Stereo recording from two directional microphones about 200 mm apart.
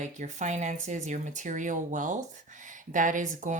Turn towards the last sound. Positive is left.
turn(degrees=-40)  # may be behind; listen again after turning